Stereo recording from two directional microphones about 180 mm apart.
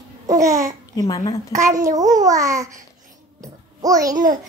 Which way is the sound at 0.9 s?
20° left (ahead or behind).